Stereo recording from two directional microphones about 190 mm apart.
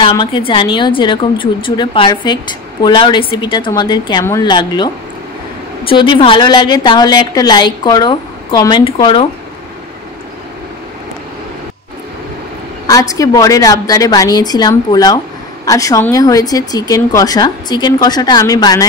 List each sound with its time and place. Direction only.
0.0 s a woman's voice: 25° left (ahead or behind)
12.8 s a woman's voice: 20° left (ahead or behind)